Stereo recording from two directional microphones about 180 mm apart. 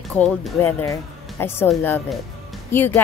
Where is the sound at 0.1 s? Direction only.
5° left (ahead or behind).